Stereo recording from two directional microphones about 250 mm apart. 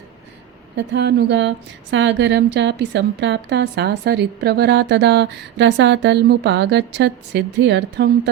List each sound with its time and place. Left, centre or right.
0.8 s a woman's voice: right